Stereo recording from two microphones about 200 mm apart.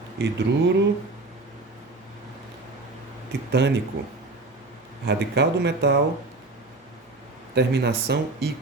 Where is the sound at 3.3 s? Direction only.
60° right (ahead or behind).